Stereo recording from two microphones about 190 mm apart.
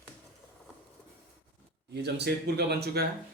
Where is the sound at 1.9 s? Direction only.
60° right (ahead or behind).